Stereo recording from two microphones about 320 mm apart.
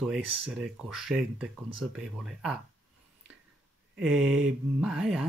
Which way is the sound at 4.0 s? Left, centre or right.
Centre.